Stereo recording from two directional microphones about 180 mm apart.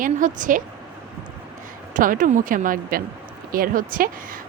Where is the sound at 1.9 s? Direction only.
50° right (ahead or behind).